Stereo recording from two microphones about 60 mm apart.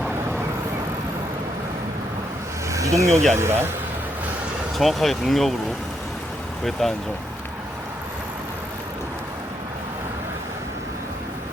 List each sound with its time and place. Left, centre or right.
2.7 s speech: right
3.3 s speech: right
4.8 s speech: centre
6.7 s speech: centre